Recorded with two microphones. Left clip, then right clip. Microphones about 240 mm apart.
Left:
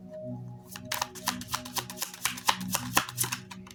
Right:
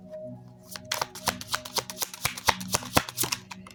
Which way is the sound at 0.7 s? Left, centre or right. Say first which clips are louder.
Right 2 dB; right.